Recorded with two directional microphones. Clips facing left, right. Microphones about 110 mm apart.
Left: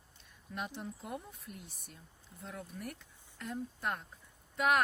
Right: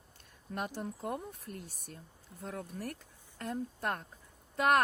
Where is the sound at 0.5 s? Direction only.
50° right (ahead or behind).